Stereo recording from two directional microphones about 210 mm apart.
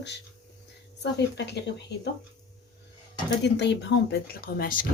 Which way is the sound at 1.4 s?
55° left (ahead or behind).